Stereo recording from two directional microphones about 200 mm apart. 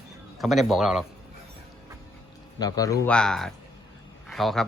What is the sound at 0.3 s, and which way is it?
Speech, centre (ahead or behind).